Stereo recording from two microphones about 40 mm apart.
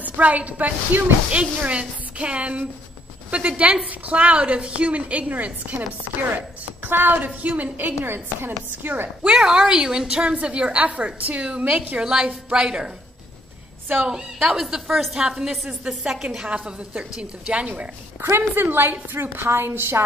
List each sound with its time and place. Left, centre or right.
0.0 s a woman's voice: right
1.3 s a woman's voice: right
6.3 s speech: right
7.4 s speech: right
9.2 s a woman's voice: centre; by 12.0 s right
12.0 s a woman's voice: centre
12.3 s a woman's voice: right
12.6 s a woman's voice: centre
14.0 s a woman's voice: centre
16.4 s a woman's voice: right
18.3 s a woman's voice: right